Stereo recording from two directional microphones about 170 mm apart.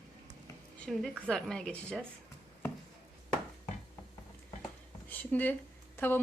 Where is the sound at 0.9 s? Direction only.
Centre (ahead or behind).